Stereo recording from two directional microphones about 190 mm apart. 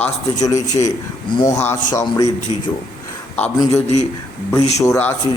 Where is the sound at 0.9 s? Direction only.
20° left (ahead or behind).